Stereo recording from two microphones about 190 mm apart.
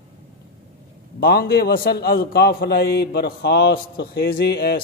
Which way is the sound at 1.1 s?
55° left (ahead or behind).